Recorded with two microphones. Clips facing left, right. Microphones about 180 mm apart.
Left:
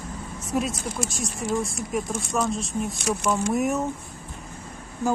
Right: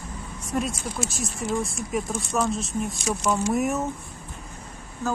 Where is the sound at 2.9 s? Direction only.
60° left (ahead or behind).